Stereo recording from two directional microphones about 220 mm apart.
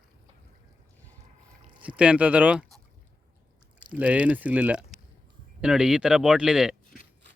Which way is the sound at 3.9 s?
5° right (ahead or behind).